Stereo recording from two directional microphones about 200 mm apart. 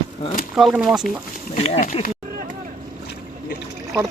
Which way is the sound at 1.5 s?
30° left (ahead or behind).